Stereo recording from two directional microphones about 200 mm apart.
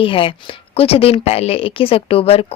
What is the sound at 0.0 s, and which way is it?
A woman's voice, 25° left (ahead or behind).